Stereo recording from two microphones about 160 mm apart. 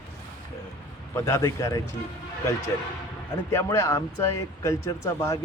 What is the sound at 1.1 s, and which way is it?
Speech, 20° left (ahead or behind).